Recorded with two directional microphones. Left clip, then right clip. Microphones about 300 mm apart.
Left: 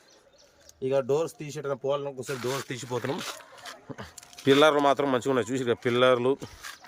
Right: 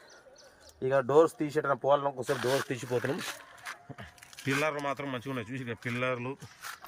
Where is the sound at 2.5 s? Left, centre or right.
Centre.